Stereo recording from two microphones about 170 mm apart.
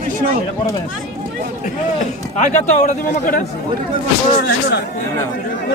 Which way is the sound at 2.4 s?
45° left (ahead or behind).